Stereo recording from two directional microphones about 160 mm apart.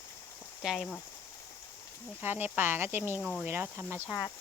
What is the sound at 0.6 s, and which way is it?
Speech, centre (ahead or behind).